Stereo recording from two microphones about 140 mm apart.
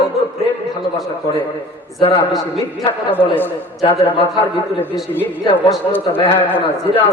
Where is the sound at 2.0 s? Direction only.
40° left (ahead or behind).